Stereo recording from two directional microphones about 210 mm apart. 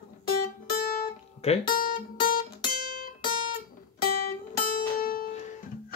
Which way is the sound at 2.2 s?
45° left (ahead or behind).